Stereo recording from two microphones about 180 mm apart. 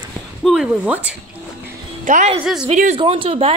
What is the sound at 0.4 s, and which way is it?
Speech, centre (ahead or behind).